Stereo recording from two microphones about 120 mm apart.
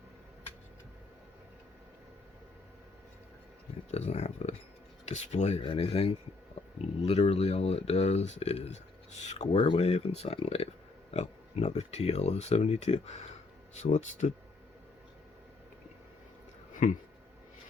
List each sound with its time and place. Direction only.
3.9 s speech: 65° left (ahead or behind)
9.6 s speech: 50° left (ahead or behind)
11.1 s speech: 60° left (ahead or behind)
13.7 s speech: 80° left